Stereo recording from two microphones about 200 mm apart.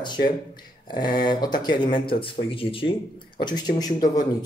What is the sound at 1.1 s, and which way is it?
Speech, 20° left (ahead or behind).